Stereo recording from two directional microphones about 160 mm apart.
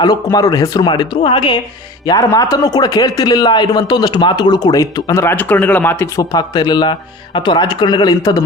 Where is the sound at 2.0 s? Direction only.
25° left (ahead or behind).